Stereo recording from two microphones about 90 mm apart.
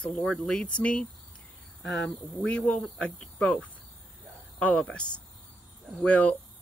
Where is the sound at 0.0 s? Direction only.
10° left (ahead or behind).